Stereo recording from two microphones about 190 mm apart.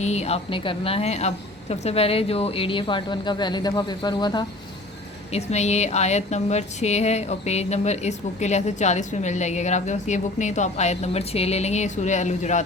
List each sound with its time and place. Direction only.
0.0 s speech: 35° left (ahead or behind)
5.3 s speech: 35° left (ahead or behind)